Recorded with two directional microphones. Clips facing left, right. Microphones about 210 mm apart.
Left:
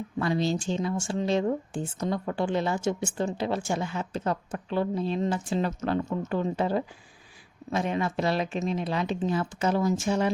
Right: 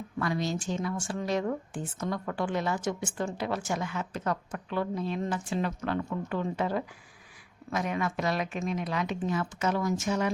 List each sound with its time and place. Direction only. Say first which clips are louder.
0.2 s speech: left 4 dB; 30° left (ahead or behind)